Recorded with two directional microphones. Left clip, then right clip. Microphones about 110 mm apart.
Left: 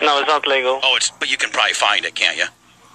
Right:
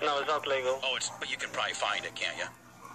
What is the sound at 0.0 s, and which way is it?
A man's voice, 40° left (ahead or behind).